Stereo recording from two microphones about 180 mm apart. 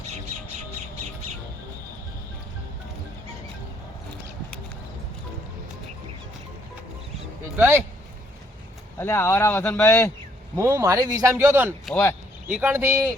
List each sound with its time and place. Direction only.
7.5 s speech: 10° right (ahead or behind)
9.0 s speech: 15° left (ahead or behind)
10.5 s a man's voice: 15° right (ahead or behind)
11.9 s speech: 10° left (ahead or behind)
12.5 s a man's voice: 10° right (ahead or behind)